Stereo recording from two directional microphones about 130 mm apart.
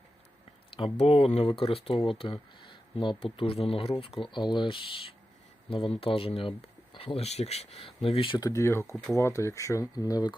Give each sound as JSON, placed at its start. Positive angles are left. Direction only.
{"t": 0.9, "sound": "speech", "side_deg": 50}
{"t": 8.4, "sound": "speech", "side_deg": 25}